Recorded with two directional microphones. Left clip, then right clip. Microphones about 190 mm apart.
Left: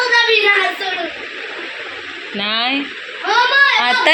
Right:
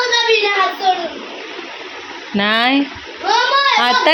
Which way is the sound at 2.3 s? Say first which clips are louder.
Right 4 dB; 40° right (ahead or behind).